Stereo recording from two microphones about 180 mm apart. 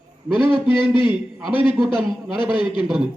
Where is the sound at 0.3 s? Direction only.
25° left (ahead or behind).